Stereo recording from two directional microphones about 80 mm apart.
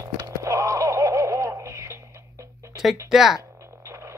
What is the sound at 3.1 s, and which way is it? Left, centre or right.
Speech, centre.